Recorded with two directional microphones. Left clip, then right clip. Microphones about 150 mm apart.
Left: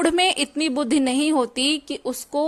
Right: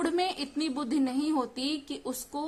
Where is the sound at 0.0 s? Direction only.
45° left (ahead or behind).